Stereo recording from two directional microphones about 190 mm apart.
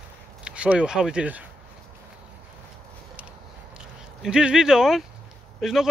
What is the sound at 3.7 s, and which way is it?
Speech, 5° right (ahead or behind).